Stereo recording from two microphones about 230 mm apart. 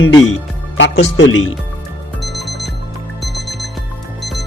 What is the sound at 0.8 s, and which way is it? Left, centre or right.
Speech, left.